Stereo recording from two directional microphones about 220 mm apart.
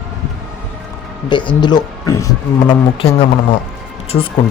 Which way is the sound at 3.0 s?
25° left (ahead or behind).